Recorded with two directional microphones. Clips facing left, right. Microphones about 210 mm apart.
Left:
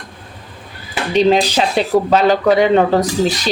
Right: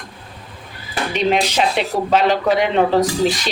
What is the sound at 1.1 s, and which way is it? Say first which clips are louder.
Speech: left 5 dB; 35° left (ahead or behind).